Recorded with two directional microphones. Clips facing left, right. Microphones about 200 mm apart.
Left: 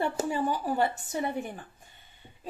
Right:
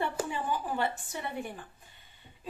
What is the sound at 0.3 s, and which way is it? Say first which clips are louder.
A woman's voice: left 4 dB; 40° left (ahead or behind).